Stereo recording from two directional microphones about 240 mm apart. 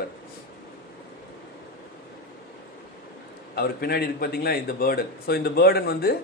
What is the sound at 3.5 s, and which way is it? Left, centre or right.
A man's voice, left.